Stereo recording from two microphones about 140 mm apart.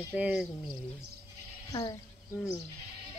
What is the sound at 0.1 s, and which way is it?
Speech, 5° right (ahead or behind).